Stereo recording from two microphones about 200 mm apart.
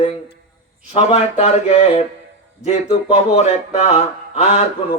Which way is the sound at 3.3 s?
35° left (ahead or behind).